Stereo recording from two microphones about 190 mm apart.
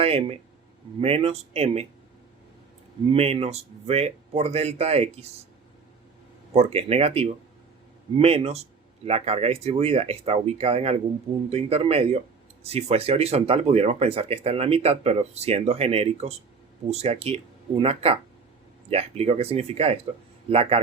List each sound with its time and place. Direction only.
0.0 s speech: 30° right (ahead or behind)
3.1 s speech: 30° right (ahead or behind)
6.5 s speech: 35° right (ahead or behind)